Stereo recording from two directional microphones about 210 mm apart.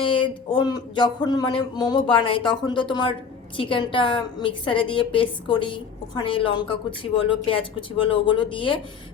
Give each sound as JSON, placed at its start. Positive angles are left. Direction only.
{"t": 0.0, "sound": "a woman's voice", "side_deg": 25}